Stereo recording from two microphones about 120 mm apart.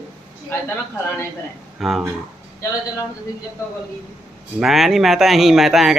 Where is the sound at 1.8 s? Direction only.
Centre (ahead or behind).